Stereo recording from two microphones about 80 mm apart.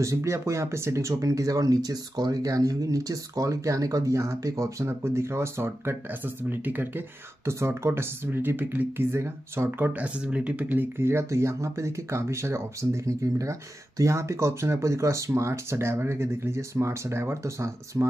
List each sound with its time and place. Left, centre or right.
0.0 s speech: right